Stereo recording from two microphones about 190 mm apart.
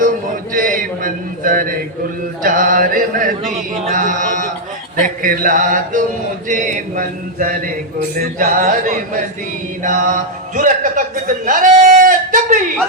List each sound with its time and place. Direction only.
0.5 s mantra: 45° right (ahead or behind)
2.4 s a man's voice: 45° right (ahead or behind)
11.4 s a sound: 45° right (ahead or behind)